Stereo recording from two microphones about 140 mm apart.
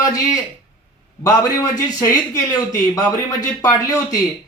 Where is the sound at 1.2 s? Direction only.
25° left (ahead or behind).